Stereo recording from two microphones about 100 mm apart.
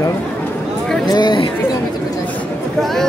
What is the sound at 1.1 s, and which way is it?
Chatter, 50° left (ahead or behind).